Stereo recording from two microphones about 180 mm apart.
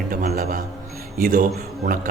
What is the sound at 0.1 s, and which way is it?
Music, 50° right (ahead or behind).